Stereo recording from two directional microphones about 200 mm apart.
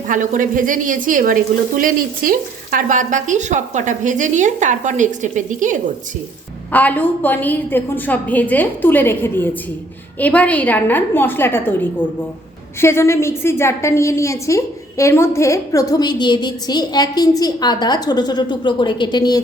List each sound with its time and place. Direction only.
0.1 s a woman's voice: 40° right (ahead or behind)
6.7 s a woman's voice: 10° left (ahead or behind)